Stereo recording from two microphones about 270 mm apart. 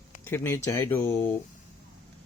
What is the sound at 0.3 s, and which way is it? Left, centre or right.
Speech, centre.